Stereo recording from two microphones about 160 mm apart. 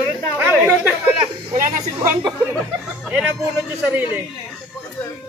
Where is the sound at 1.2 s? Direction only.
45° right (ahead or behind).